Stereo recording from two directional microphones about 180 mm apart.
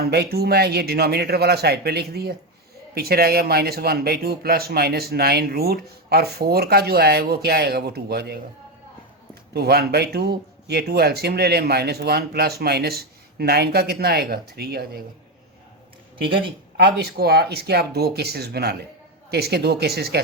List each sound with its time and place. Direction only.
0.1 s speech: 60° right (ahead or behind)
9.5 s speech: 60° right (ahead or behind)
16.2 s a woman's voice: 30° right (ahead or behind)
16.7 s speech: 65° right (ahead or behind)